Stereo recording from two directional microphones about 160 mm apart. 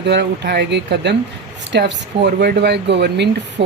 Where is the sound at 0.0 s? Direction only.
90° right.